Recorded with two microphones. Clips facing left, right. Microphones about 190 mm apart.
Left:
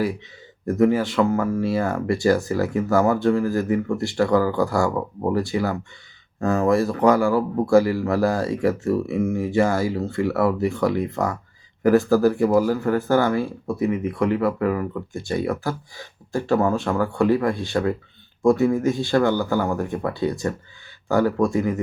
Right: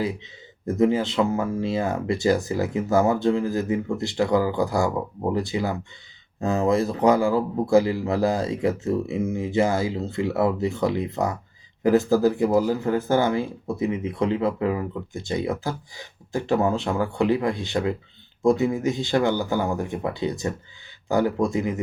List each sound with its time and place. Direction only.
0.6 s speech: 20° right (ahead or behind)